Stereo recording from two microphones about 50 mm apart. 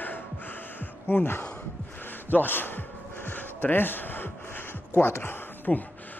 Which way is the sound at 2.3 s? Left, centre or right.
Left.